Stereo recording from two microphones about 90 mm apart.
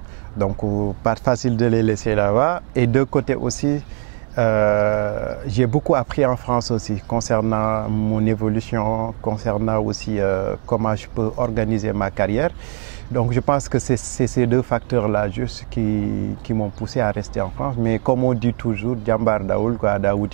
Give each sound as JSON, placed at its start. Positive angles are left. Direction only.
{"t": 0.4, "sound": "speech", "side_deg": -15}